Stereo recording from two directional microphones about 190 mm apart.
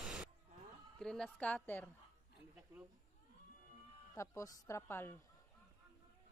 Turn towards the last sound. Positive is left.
turn(degrees=10)  # may be behind; listen again after turning